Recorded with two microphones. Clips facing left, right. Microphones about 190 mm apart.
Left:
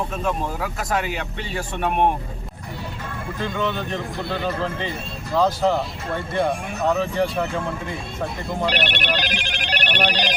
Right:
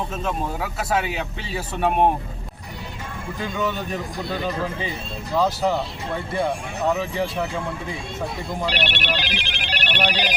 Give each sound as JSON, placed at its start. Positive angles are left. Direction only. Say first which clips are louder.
{"t": 0.3, "sound": "speech", "louder": "left 1 dB", "side_deg": -5}
{"t": 3.3, "sound": "speech", "louder": "left 1 dB", "side_deg": -15}
{"t": 8.7, "sound": "speech", "louder": "left 2 dB", "side_deg": 50}
{"t": 10.1, "sound": "speech", "louder": "left 1 dB", "side_deg": -10}